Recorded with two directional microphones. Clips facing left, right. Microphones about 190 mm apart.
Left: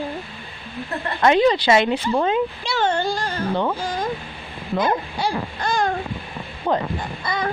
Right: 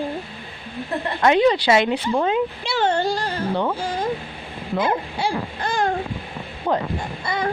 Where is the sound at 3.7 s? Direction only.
30° right (ahead or behind).